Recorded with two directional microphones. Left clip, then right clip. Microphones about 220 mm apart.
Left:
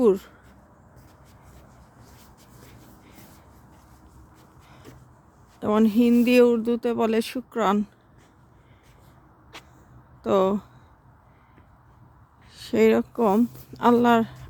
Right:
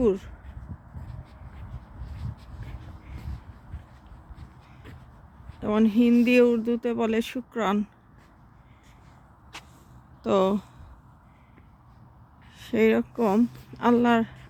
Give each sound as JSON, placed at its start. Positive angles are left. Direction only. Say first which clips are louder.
{"t": 0.0, "sound": "speech", "louder": "left 4 dB", "side_deg": 20}
{"t": 5.5, "sound": "speech", "louder": "left 2 dB", "side_deg": 20}
{"t": 9.5, "sound": "vehicle", "louder": "right 1 dB", "side_deg": 5}
{"t": 10.2, "sound": "speech", "louder": "left 2 dB", "side_deg": 5}
{"t": 12.5, "sound": "speech", "louder": "left 3 dB", "side_deg": 15}